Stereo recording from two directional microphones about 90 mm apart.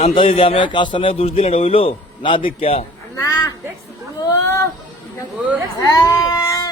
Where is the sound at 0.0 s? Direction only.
85° left.